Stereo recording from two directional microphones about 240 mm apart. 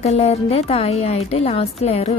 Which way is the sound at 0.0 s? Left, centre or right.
Left.